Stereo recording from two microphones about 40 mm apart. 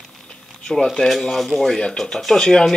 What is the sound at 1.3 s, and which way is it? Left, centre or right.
Speech, centre.